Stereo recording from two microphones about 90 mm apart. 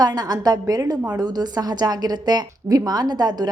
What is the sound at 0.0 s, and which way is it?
A woman's voice, 45° right (ahead or behind).